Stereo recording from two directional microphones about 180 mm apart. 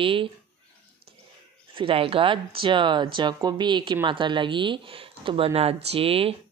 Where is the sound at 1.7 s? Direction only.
30° right (ahead or behind).